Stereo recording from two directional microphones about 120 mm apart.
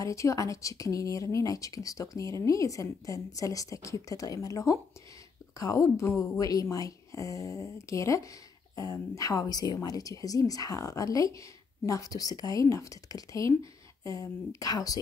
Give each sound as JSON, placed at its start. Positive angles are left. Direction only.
{"t": 0.0, "sound": "speech", "side_deg": 25}